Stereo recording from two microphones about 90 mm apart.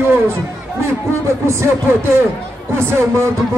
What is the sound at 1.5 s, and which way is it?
Speech, 30° right (ahead or behind).